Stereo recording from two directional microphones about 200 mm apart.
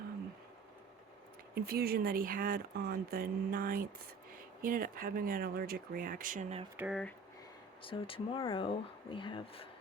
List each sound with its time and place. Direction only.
1.5 s speech: 50° right (ahead or behind); by 6.7 s 35° right (ahead or behind)
6.7 s speech: 5° right (ahead or behind)
7.8 s speech: 25° left (ahead or behind)